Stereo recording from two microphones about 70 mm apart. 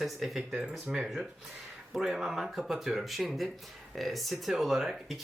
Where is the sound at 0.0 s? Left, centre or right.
Centre.